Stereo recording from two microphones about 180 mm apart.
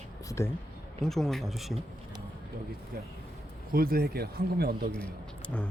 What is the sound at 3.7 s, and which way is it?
Speech, 55° right (ahead or behind).